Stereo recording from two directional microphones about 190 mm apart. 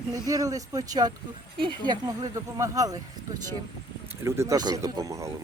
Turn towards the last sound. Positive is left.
turn(degrees=-15)  # may be behind; listen again after turning